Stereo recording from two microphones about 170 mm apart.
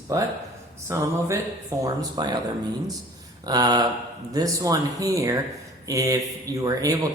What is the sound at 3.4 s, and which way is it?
Speech, 25° right (ahead or behind).